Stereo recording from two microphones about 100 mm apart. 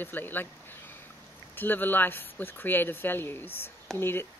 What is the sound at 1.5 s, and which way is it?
Speech, 20° left (ahead or behind).